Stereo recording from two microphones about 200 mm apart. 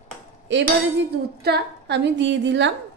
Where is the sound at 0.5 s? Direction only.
65° right (ahead or behind).